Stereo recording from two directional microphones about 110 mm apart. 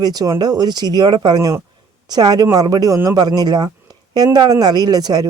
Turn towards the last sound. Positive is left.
turn(degrees=-35)  # may be behind; listen again after turning